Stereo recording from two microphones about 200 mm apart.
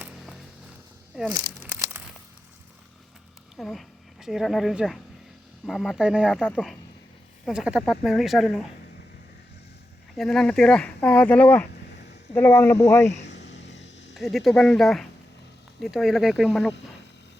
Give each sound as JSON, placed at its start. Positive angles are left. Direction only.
{"t": 1.3, "sound": "crumpling", "side_deg": -10}
{"t": 3.6, "sound": "a woman's voice", "side_deg": 0}
{"t": 7.4, "sound": "speech", "side_deg": -5}
{"t": 10.2, "sound": "speech", "side_deg": 5}
{"t": 13.2, "sound": "a sound", "side_deg": 60}
{"t": 14.1, "sound": "speech", "side_deg": 0}